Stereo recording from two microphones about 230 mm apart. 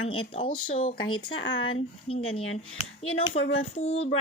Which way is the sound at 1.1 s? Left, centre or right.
Left.